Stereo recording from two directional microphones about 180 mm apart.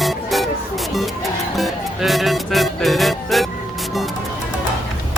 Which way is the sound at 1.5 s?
Centre (ahead or behind).